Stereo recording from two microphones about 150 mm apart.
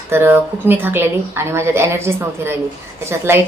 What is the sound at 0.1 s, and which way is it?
Speech, 15° right (ahead or behind).